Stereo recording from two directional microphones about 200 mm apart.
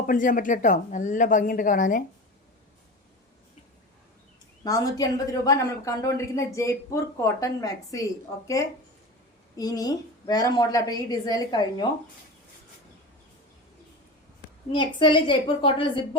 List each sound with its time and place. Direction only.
0.0 s speech: 40° left (ahead or behind)
4.6 s speech: 20° left (ahead or behind)
9.6 s a woman's voice: 20° left (ahead or behind)
14.7 s a woman's voice: 25° left (ahead or behind)